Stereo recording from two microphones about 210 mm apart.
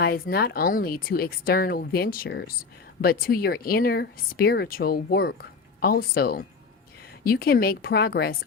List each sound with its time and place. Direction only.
0.0 s speech: 45° left (ahead or behind)